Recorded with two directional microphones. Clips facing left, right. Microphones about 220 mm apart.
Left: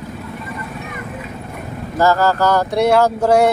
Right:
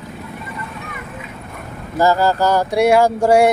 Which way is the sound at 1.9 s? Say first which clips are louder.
Even; 15° right (ahead or behind).